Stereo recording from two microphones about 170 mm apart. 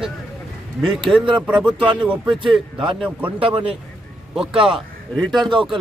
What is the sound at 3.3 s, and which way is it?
Speech, 35° right (ahead or behind).